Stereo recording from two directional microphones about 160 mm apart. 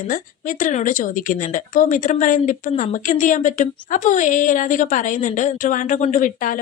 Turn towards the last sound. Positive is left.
turn(degrees=55)  # may be behind; listen again after turning